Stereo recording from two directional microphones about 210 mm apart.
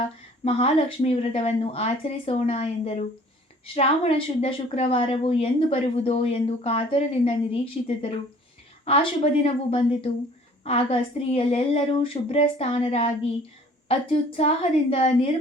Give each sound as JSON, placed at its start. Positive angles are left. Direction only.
{"t": 0.4, "sound": "a woman's voice", "side_deg": 30}